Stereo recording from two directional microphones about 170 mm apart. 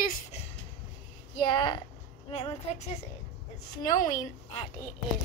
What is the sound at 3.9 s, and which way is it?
Speech, 50° left (ahead or behind).